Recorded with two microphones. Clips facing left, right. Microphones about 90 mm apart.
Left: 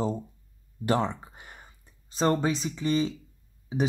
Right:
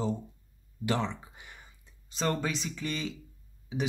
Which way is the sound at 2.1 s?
40° left (ahead or behind).